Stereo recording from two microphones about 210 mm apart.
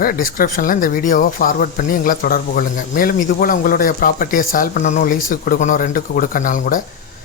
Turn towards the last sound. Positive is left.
turn(degrees=40)  # may be behind; listen again after turning